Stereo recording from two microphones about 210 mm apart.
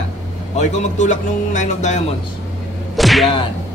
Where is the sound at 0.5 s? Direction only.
35° left (ahead or behind).